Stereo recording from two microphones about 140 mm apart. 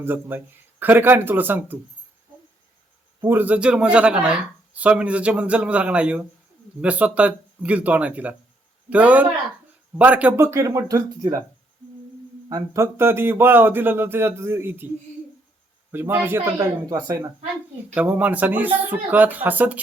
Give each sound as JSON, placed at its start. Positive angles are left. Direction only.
{"t": 0.0, "sound": "speech", "side_deg": -15}
{"t": 3.2, "sound": "speech", "side_deg": -15}
{"t": 12.5, "sound": "speech", "side_deg": -25}
{"t": 15.9, "sound": "speech", "side_deg": -15}
{"t": 17.9, "sound": "speech", "side_deg": -10}